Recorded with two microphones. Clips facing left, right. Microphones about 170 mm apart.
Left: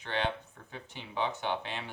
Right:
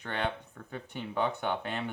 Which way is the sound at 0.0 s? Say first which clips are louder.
Even; 55° right (ahead or behind).